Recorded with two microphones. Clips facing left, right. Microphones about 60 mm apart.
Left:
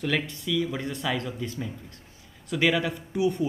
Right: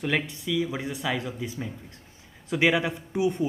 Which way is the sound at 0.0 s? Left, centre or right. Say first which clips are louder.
Even; centre.